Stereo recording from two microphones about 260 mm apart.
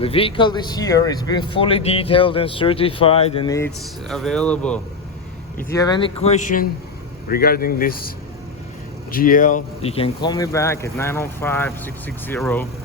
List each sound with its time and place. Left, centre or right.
0.0 s speech: left
4.1 s speech: centre; by 8.1 s left
9.1 s speech: left; by 12.6 s centre